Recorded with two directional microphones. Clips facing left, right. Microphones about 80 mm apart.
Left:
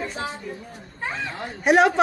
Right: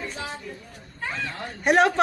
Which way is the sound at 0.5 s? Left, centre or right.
Centre.